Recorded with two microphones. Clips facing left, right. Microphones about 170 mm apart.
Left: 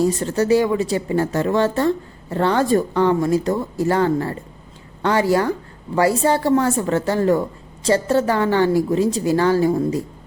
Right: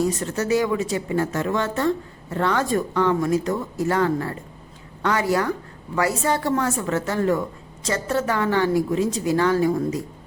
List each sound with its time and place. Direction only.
0.0 s a woman's voice: 30° left (ahead or behind)